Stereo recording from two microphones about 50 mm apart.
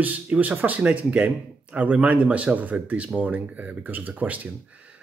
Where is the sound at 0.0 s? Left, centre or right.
Right.